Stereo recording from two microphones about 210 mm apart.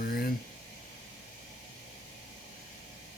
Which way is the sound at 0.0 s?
45° left (ahead or behind).